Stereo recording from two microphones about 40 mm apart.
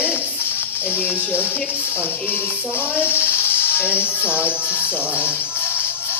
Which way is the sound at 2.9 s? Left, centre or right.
Right.